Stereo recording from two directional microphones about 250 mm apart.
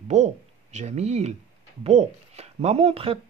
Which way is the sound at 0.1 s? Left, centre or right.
Right.